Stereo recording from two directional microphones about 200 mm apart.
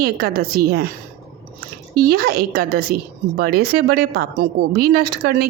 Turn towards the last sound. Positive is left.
turn(degrees=-50)  # may be behind; listen again after turning